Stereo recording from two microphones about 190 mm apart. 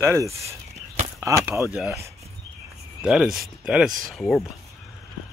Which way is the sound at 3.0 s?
5° right (ahead or behind).